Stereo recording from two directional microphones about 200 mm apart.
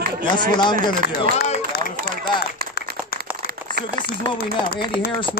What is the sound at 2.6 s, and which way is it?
Clapping, 50° right (ahead or behind).